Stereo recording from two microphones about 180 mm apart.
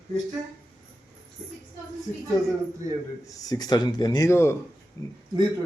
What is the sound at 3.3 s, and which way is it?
A man's voice, 20° left (ahead or behind).